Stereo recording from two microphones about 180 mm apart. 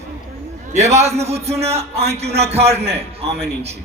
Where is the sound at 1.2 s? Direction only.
35° right (ahead or behind).